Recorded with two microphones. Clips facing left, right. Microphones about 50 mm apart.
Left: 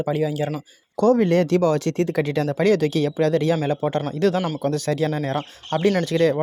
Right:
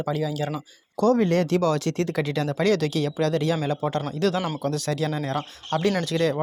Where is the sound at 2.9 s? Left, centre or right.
Left.